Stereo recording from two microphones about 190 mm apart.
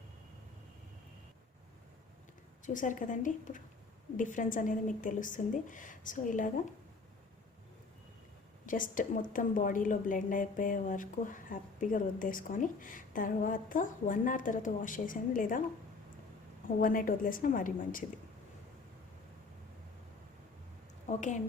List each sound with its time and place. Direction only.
2.6 s a woman's voice: 40° left (ahead or behind)
8.6 s a woman's voice: 45° left (ahead or behind)
16.8 s a woman's voice: 45° left (ahead or behind)
21.1 s a woman's voice: 40° left (ahead or behind)